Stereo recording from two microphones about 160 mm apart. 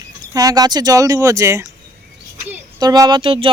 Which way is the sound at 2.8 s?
25° right (ahead or behind).